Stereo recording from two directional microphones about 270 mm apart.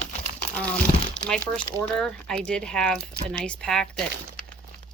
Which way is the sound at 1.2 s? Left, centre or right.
Centre.